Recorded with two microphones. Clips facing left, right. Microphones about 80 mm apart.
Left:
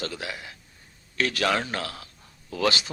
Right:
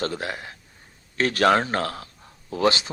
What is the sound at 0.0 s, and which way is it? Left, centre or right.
Speech, right.